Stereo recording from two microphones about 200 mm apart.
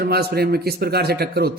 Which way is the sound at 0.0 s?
55° right (ahead or behind).